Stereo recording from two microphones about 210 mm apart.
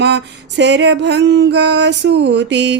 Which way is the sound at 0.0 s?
55° right (ahead or behind).